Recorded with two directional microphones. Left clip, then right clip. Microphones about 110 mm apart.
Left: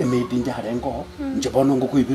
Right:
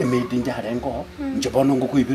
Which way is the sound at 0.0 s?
5° right (ahead or behind).